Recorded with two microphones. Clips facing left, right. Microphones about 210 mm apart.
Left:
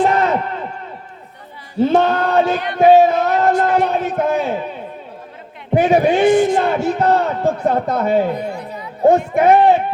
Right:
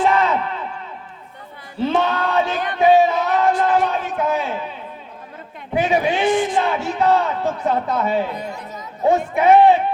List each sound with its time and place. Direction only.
0.0 s chop: 45° left (ahead or behind)
1.8 s a man's voice: 45° left (ahead or behind)
5.7 s a man's voice: 45° left (ahead or behind)
8.4 s chatter: 45° right (ahead or behind)
9.0 s a man's voice: 45° left (ahead or behind)